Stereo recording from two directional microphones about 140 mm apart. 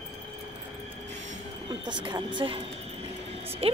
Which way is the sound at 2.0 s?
35° right (ahead or behind).